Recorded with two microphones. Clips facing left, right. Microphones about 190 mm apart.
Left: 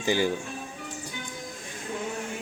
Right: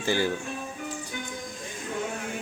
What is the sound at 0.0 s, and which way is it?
Speech, 15° left (ahead or behind).